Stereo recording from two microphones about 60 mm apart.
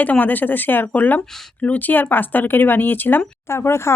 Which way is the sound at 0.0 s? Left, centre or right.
Left.